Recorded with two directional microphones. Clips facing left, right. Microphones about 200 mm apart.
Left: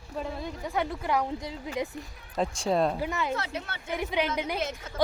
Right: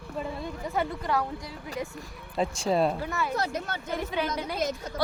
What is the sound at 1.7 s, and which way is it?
Speech, 20° left (ahead or behind).